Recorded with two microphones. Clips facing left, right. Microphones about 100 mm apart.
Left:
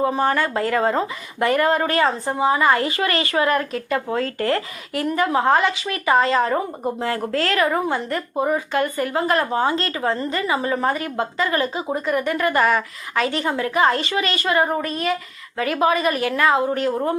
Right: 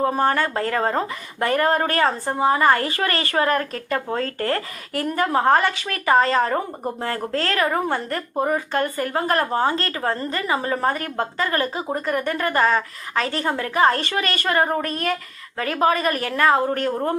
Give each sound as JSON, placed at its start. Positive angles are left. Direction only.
{"t": 0.0, "sound": "speech", "side_deg": -40}
{"t": 15.5, "sound": "speech", "side_deg": -35}